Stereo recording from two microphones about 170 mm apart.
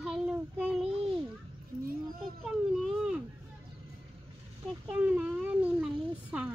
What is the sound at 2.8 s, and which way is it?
Speech, 5° right (ahead or behind).